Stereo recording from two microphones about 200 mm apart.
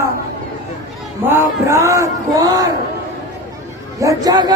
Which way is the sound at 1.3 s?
15° right (ahead or behind).